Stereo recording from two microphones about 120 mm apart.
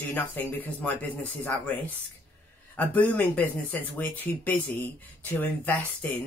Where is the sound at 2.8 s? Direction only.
15° left (ahead or behind).